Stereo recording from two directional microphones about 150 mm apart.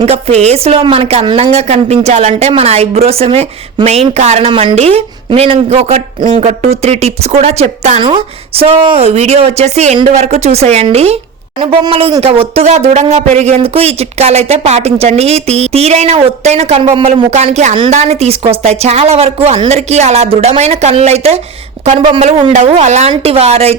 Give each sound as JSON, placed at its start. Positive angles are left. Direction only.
{"t": 0.0, "sound": "speech", "side_deg": -45}